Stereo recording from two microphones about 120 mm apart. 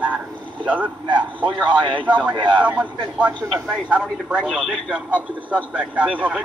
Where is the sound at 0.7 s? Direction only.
10° right (ahead or behind).